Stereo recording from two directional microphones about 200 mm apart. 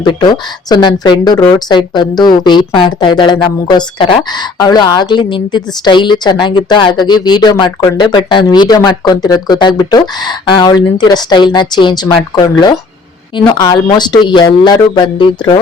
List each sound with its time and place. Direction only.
0.0 s speech: 20° left (ahead or behind)
13.3 s speech: 25° left (ahead or behind)